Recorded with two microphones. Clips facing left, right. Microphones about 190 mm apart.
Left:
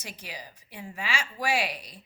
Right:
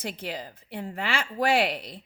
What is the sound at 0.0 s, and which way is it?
A woman's voice, 55° right (ahead or behind).